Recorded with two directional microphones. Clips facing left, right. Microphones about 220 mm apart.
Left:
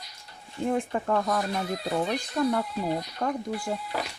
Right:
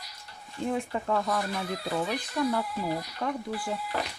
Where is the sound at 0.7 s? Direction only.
50° left (ahead or behind).